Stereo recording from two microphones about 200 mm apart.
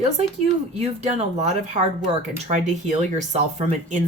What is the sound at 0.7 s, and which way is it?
Speech, 35° right (ahead or behind).